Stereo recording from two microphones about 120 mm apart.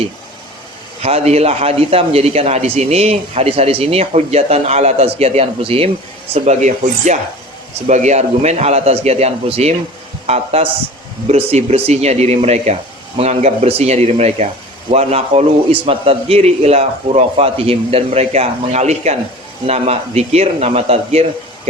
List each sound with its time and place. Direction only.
1.0 s a man's voice: 60° right (ahead or behind)
6.3 s a man's voice: 70° right (ahead or behind)